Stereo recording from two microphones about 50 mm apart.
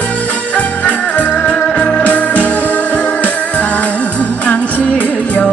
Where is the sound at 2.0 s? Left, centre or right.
Left.